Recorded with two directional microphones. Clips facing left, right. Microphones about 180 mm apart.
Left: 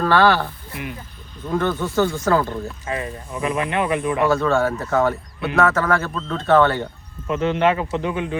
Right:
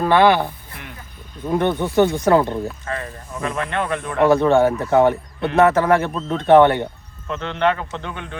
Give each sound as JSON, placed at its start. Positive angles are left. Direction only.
{"t": 0.0, "sound": "speech", "side_deg": -15}
{"t": 2.8, "sound": "speech", "side_deg": 10}
{"t": 4.2, "sound": "speech", "side_deg": -20}
{"t": 7.3, "sound": "speech", "side_deg": 10}